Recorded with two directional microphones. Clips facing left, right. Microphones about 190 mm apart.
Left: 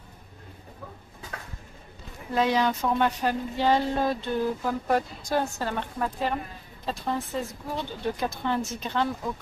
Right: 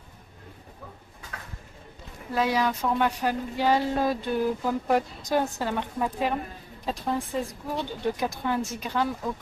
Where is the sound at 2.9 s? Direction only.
10° right (ahead or behind).